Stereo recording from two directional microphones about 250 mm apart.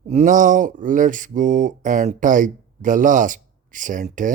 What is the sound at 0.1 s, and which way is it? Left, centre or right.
Speech, right.